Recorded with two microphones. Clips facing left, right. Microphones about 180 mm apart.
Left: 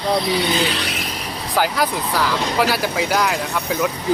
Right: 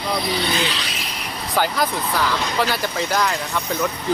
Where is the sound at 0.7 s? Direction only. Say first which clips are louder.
Left 4 dB; 60° left (ahead or behind).